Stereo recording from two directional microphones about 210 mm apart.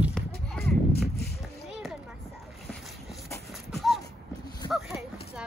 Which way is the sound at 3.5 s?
Centre (ahead or behind).